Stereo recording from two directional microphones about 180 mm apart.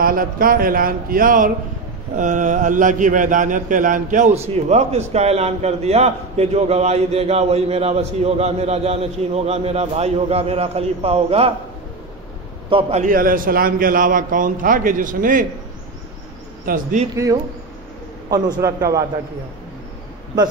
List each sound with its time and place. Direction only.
0.0 s a man's voice: 50° right (ahead or behind); by 11.5 s 35° right (ahead or behind)
12.6 s a man's voice: 30° right (ahead or behind)
13.0 s a man's voice: 50° right (ahead or behind)
16.6 s a man's voice: 50° right (ahead or behind)
17.1 s a man's voice: 20° right (ahead or behind)